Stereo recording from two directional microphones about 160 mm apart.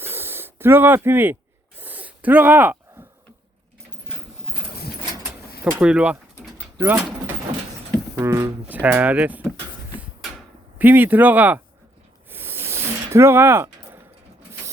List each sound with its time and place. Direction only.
0.0 s snake: 15° right (ahead or behind)
1.8 s a sound: 10° right (ahead or behind)
5.8 s pigeon: 5° right (ahead or behind)
8.1 s speech: 15° right (ahead or behind)
10.8 s speech: 10° right (ahead or behind)
12.3 s a sound: 15° right (ahead or behind)